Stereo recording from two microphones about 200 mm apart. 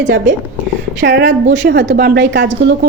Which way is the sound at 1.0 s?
60° right (ahead or behind).